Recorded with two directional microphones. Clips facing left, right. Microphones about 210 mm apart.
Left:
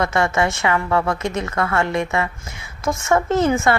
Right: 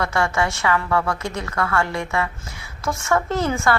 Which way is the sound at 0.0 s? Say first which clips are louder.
Left 3 dB; 20° left (ahead or behind).